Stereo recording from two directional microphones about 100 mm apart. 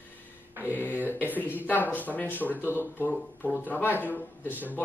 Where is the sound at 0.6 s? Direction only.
20° right (ahead or behind).